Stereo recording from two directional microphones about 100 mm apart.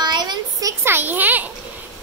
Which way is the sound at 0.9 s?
20° right (ahead or behind).